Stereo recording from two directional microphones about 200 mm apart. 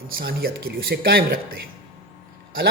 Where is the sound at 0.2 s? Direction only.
50° right (ahead or behind).